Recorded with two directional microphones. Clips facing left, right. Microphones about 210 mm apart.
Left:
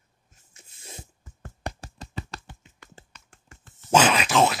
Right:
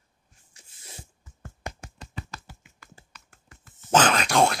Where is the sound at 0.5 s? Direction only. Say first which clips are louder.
Left 4 dB; 25° left (ahead or behind).